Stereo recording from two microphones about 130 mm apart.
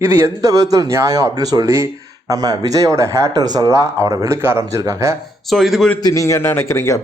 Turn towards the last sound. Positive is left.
turn(degrees=20)  # may be behind; listen again after turning